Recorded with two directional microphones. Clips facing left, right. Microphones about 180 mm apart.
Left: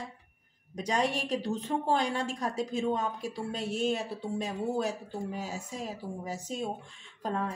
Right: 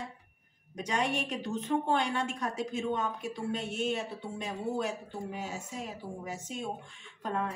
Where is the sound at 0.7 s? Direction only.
35° left (ahead or behind).